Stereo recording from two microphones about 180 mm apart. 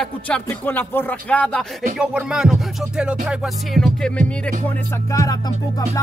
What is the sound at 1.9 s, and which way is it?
Music, 5° right (ahead or behind).